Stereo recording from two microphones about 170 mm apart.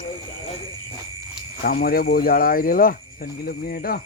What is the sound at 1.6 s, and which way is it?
Speech, 60° left (ahead or behind).